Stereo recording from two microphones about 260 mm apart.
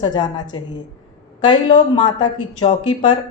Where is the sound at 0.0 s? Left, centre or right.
Centre.